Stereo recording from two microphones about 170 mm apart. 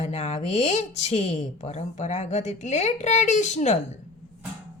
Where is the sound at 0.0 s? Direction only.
40° left (ahead or behind).